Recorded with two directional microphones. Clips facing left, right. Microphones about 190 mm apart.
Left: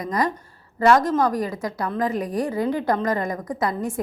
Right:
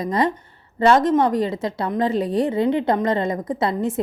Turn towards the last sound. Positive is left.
turn(degrees=-25)  # may be behind; listen again after turning